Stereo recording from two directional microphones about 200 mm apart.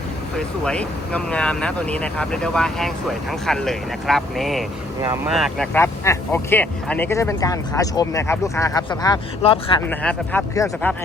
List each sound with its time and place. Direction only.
0.3 s speech: 5° left (ahead or behind)
4.9 s speech: 15° right (ahead or behind)
5.3 s speech: centre (ahead or behind)
5.7 s speech: 10° left (ahead or behind); by 9.8 s 25° left (ahead or behind)
9.9 s speech: 5° left (ahead or behind)